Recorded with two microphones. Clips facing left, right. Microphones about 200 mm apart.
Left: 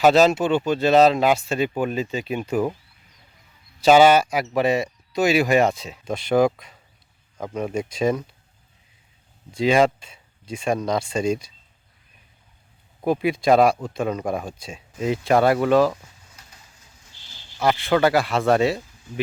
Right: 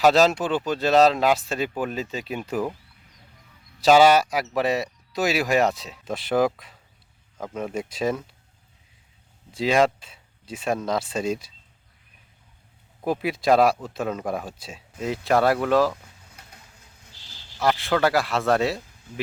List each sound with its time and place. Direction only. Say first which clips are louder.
0.0 s speech: left 2 dB; centre (ahead or behind)
3.8 s speech: left 2 dB; centre (ahead or behind)
9.5 s speech: left 2 dB; centre (ahead or behind)
13.1 s speech: left 3 dB; centre (ahead or behind)
16.3 s a sound: right 2 dB; 60° right (ahead or behind)
17.1 s a sound: right 1 dB; 35° right (ahead or behind)
17.6 s speech: left 3 dB; centre (ahead or behind)